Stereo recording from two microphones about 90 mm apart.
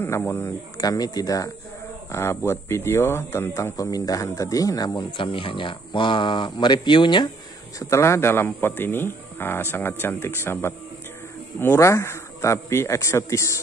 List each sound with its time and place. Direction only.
0.7 s speech: 45° left (ahead or behind)
2.1 s speech: 30° left (ahead or behind); by 5.0 s 45° left (ahead or behind)
5.1 s speech: 75° left (ahead or behind); by 7.2 s 60° left (ahead or behind)
7.9 s speech: 30° left (ahead or behind)